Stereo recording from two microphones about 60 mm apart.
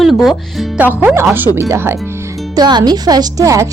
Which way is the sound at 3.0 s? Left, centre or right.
Right.